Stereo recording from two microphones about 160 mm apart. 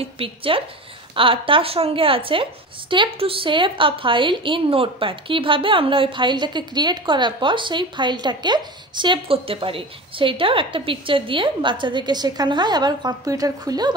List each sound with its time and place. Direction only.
0.0 s a woman's voice: 35° right (ahead or behind)